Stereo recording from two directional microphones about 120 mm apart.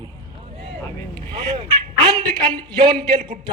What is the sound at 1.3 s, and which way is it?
A man's voice, 40° right (ahead or behind).